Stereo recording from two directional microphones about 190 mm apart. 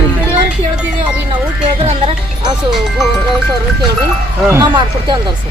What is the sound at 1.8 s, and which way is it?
Speech, 35° right (ahead or behind).